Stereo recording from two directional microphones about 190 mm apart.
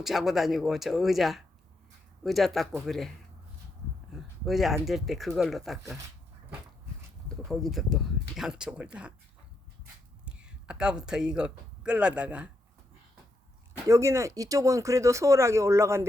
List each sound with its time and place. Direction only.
0.0 s speech: centre (ahead or behind)
4.1 s speech: centre (ahead or behind)
7.4 s speech: centre (ahead or behind)
10.2 s speech: 5° right (ahead or behind)
13.8 s speech: 15° right (ahead or behind)